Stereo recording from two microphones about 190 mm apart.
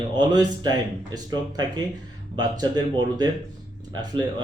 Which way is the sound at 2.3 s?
20° right (ahead or behind).